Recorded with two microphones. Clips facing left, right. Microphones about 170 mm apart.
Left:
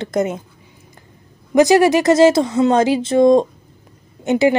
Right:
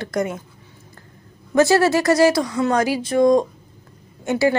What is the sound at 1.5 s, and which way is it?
Speech, 15° left (ahead or behind).